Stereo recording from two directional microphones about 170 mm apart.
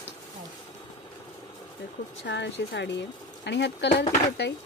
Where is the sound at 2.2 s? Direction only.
90° left.